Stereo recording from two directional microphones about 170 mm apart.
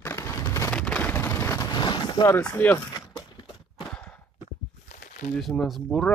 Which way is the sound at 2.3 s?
10° left (ahead or behind).